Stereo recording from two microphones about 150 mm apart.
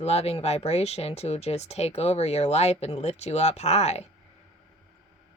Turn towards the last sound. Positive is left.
turn(degrees=45)  # may be behind; listen again after turning